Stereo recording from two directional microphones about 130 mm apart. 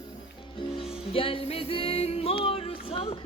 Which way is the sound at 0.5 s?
40° left (ahead or behind).